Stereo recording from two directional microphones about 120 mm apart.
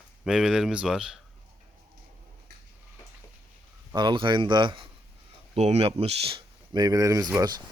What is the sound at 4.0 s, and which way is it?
Speech, 40° right (ahead or behind).